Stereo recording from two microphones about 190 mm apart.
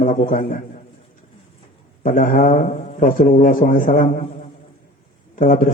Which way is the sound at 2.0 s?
45° left (ahead or behind).